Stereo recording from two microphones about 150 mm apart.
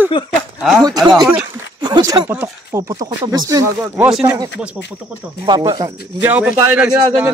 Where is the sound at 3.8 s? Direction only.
10° right (ahead or behind).